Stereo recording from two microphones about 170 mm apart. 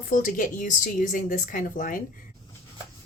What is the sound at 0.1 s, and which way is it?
Speech, 50° left (ahead or behind).